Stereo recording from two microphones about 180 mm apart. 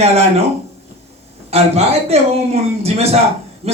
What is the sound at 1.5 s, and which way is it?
A man's voice, 35° right (ahead or behind).